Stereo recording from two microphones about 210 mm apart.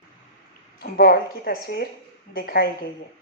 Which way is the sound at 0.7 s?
45° left (ahead or behind).